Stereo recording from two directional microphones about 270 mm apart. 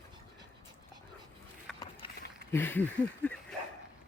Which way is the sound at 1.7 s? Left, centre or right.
Centre.